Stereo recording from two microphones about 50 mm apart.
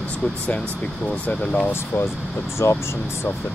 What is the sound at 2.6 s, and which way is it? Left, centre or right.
Speech, left.